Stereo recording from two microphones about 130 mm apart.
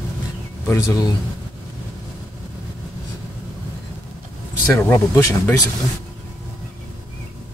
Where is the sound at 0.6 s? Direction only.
25° left (ahead or behind).